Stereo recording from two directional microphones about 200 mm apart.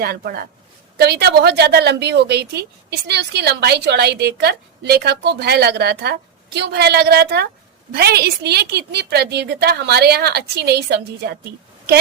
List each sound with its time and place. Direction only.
0.0 s a woman's voice: 50° right (ahead or behind)